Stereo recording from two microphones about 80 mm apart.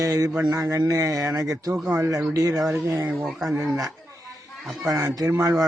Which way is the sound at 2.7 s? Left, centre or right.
Right.